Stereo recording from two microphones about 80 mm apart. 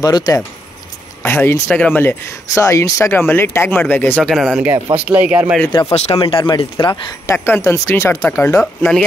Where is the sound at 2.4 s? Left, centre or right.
Left.